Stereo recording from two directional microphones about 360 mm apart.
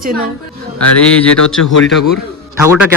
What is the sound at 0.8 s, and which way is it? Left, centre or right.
Speech, centre.